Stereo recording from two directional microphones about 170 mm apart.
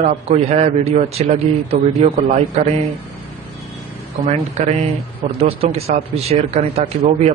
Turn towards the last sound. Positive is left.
turn(degrees=-35)  # may be behind; listen again after turning